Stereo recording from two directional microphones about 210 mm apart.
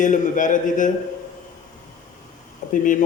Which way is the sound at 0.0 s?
40° left (ahead or behind).